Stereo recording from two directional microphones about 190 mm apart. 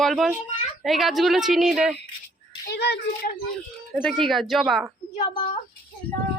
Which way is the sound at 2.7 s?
65° left (ahead or behind).